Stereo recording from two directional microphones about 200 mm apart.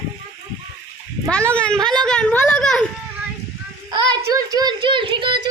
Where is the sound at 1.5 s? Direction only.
5° left (ahead or behind).